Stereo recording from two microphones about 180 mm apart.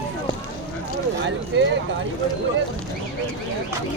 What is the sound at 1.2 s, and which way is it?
Speech, 90° right.